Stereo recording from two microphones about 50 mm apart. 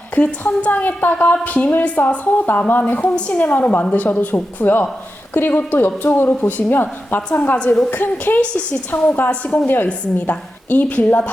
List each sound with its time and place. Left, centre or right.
0.2 s a woman's voice: left
3.1 s a woman's voice: left
7.6 s a woman's voice: left
7.9 s a woman's voice: left
9.6 s a woman's voice: left